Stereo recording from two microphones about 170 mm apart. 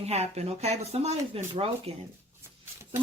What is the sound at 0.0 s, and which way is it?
Speech, 40° right (ahead or behind).